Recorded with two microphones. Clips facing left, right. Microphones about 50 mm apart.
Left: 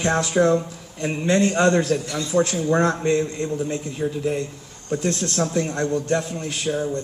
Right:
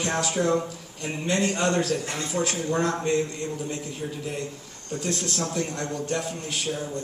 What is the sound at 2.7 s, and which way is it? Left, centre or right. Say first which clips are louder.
A man's voice: left 4 dB; left.